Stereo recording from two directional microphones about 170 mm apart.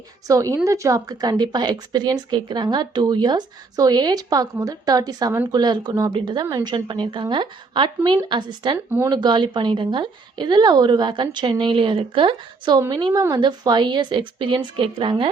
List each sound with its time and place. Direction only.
0.3 s a woman's voice: 20° right (ahead or behind)